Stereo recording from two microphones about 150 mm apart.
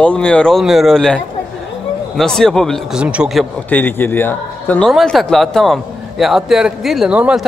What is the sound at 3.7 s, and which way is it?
A man's voice, 15° left (ahead or behind).